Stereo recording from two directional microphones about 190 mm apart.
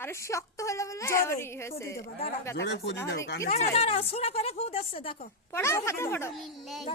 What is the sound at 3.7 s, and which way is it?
Speech, 30° left (ahead or behind).